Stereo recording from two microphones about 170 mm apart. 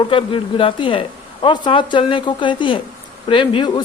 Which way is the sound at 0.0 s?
30° left (ahead or behind).